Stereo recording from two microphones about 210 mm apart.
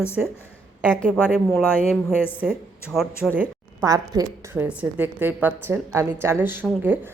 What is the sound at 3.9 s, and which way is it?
Speech, 15° right (ahead or behind).